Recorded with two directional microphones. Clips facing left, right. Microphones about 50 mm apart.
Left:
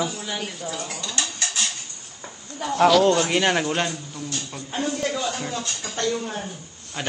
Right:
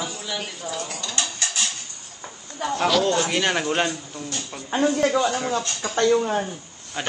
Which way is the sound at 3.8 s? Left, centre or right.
Centre.